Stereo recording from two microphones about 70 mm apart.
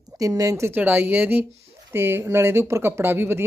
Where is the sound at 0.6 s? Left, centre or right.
Right.